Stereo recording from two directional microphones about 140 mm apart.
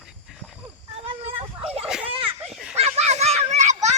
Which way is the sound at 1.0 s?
40° right (ahead or behind).